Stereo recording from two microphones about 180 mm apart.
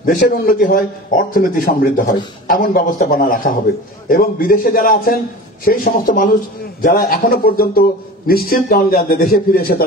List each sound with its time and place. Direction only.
0.0 s a man's voice: 50° left (ahead or behind)